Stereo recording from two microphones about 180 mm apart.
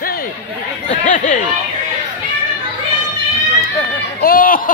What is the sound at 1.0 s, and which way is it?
Chatter, 45° left (ahead or behind).